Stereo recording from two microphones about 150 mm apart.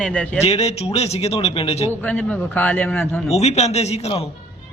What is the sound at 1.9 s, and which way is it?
A man's voice, 10° left (ahead or behind).